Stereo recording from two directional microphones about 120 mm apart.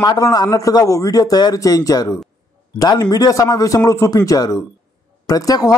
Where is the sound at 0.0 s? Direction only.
35° left (ahead or behind).